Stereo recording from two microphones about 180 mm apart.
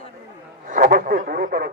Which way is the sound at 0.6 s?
50° right (ahead or behind).